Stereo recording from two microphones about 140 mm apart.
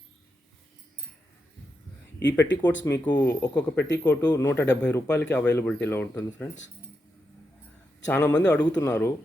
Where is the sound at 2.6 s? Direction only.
25° left (ahead or behind).